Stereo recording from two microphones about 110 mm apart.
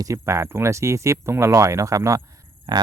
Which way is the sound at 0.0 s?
30° right (ahead or behind).